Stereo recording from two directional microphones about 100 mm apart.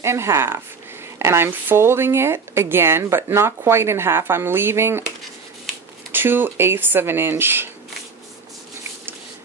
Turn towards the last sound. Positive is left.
turn(degrees=-20)  # may be behind; listen again after turning